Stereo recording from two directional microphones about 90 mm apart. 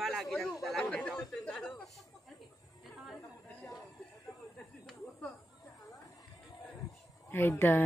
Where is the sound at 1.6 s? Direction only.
5° left (ahead or behind).